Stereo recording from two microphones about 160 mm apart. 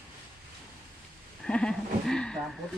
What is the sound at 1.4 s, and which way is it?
Speech, 5° left (ahead or behind).